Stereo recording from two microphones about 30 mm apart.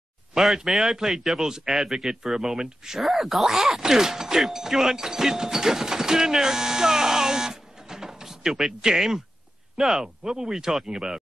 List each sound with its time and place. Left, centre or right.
0.7 s speech: centre
1.4 s speech: right
3.0 s speech: centre
10.3 s speech: right